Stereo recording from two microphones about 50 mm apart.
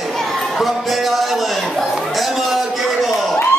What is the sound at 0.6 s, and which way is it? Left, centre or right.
Speech, centre.